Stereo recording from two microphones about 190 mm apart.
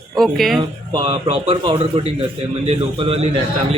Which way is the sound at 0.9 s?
30° right (ahead or behind).